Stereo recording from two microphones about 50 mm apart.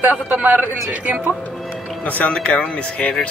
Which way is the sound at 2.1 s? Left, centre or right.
Left.